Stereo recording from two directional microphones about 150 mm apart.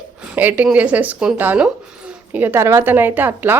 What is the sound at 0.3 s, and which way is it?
A woman's voice, 10° right (ahead or behind).